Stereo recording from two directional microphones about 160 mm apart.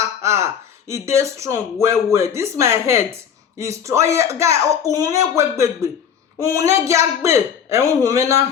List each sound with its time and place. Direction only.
0.2 s speech: 15° right (ahead or behind)